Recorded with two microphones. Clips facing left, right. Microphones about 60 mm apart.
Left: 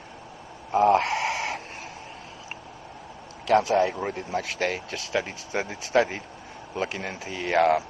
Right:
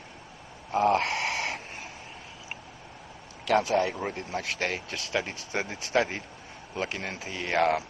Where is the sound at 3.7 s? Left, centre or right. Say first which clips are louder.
Left 3 dB; centre.